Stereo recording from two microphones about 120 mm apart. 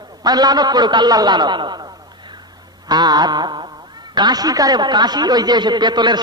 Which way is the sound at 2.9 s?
35° right (ahead or behind).